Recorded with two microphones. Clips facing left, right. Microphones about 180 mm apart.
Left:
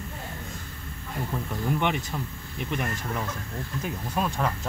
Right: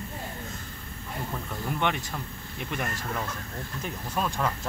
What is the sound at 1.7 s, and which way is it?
Speech, 5° left (ahead or behind).